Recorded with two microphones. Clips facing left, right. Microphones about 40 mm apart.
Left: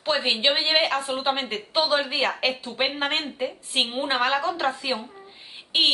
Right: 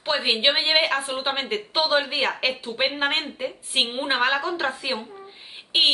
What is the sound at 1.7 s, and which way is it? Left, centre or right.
Speech, right.